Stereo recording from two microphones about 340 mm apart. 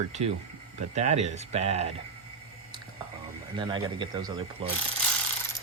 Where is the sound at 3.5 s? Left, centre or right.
Centre.